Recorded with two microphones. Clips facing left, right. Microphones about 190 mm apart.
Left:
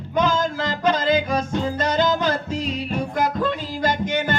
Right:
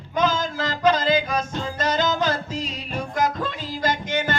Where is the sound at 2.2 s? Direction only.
55° left (ahead or behind).